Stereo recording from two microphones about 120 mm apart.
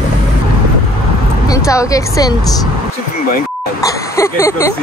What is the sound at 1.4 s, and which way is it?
Speech, 25° left (ahead or behind).